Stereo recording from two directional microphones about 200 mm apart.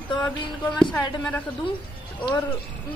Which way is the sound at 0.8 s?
5° left (ahead or behind).